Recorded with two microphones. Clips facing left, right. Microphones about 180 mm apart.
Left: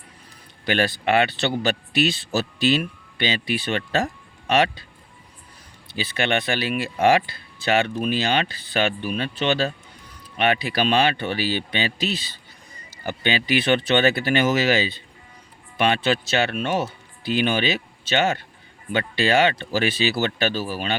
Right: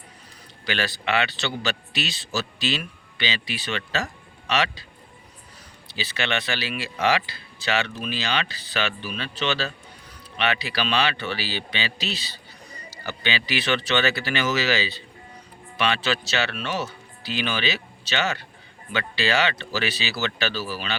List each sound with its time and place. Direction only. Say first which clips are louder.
0.6 s a man's voice: left 6 dB; 50° left (ahead or behind)
5.9 s speech: left 4 dB; 50° left (ahead or behind)